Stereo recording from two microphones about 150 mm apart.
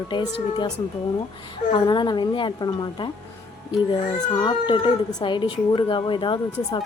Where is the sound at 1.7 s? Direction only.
30° left (ahead or behind).